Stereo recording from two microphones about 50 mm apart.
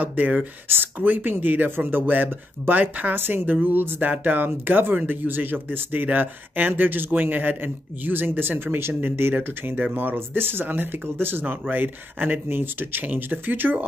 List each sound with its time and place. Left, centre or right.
0.0 s speech: right
0.7 s speech: right
3.2 s speech: right